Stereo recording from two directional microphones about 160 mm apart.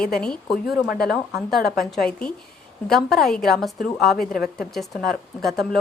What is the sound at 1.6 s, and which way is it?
Speech, 70° left (ahead or behind).